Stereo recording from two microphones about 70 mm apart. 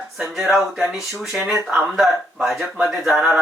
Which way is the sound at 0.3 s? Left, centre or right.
Centre.